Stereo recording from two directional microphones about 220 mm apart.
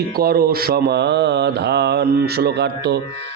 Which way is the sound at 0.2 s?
45° right (ahead or behind).